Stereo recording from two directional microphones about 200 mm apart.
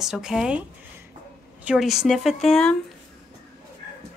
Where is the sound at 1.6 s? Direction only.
Centre (ahead or behind).